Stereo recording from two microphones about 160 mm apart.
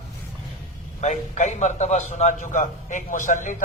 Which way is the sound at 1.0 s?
50° left (ahead or behind).